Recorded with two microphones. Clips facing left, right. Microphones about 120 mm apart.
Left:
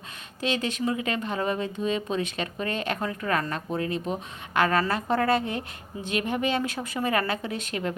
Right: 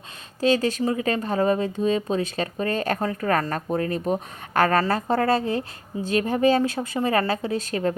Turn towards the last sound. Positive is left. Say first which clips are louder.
# right 6 dB
turn(degrees=-35)  # may be behind; listen again after turning